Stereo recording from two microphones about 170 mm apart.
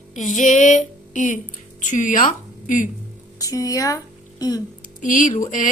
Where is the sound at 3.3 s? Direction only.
20° left (ahead or behind).